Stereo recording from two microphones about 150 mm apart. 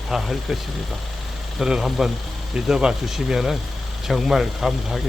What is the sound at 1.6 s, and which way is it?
Speech, 5° right (ahead or behind).